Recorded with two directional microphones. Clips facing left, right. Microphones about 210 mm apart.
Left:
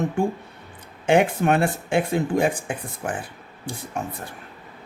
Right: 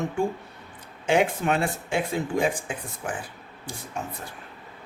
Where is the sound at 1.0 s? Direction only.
55° left (ahead or behind).